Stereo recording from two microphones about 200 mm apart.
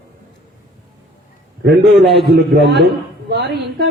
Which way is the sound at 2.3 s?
60° right (ahead or behind).